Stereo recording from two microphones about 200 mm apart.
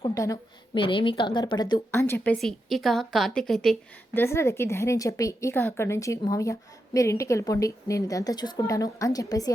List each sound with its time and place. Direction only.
0.1 s a woman's voice: 15° left (ahead or behind)